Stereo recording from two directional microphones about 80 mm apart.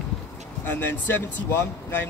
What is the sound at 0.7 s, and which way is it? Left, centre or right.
Speech, left.